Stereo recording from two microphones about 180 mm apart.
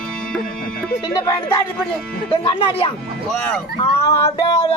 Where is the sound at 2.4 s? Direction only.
30° left (ahead or behind).